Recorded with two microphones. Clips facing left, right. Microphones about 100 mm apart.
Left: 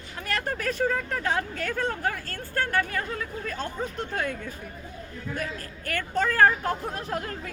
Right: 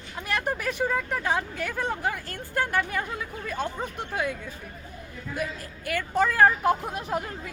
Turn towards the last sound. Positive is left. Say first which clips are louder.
# right 1 dB
turn(degrees=-15)  # may be behind; listen again after turning